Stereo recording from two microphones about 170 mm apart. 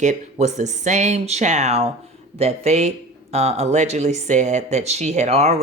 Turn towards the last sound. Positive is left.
turn(degrees=-40)  # may be behind; listen again after turning